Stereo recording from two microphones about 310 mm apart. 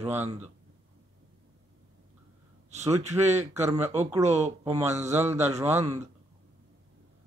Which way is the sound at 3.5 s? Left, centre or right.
Centre.